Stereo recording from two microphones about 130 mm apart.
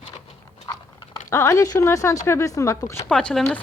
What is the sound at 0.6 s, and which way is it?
Biting, 30° left (ahead or behind).